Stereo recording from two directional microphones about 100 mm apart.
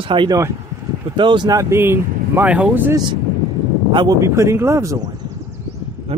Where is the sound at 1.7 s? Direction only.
25° right (ahead or behind).